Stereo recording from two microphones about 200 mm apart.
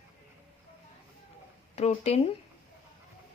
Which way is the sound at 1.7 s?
30° left (ahead or behind).